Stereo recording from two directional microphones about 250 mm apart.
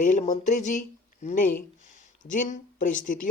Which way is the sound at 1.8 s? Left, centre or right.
Left.